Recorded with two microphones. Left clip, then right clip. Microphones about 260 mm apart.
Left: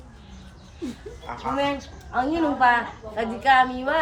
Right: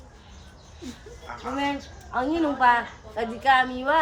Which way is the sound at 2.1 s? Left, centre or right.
Centre.